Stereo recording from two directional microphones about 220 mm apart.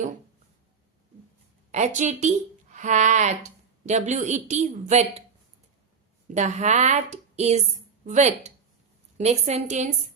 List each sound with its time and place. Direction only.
1.7 s speech: 35° right (ahead or behind)
6.2 s a woman's voice: 35° right (ahead or behind)